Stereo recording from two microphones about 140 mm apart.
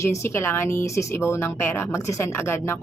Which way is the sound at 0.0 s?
20° left (ahead or behind).